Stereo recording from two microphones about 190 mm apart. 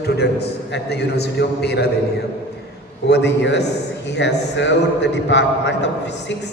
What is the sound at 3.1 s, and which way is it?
A man's voice, 65° left (ahead or behind).